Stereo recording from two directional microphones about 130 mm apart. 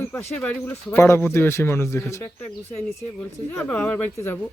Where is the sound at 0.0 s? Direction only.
15° left (ahead or behind).